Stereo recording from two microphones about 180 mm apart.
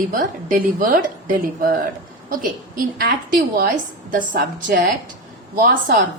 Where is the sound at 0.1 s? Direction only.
50° right (ahead or behind).